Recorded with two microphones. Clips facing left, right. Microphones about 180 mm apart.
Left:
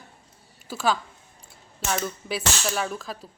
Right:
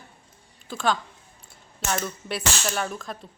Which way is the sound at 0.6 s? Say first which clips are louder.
Even; 5° left (ahead or behind).